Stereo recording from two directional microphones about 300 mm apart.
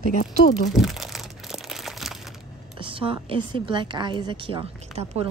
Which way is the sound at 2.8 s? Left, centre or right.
Centre.